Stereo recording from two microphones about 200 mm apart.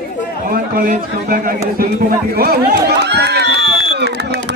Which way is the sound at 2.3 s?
50° right (ahead or behind).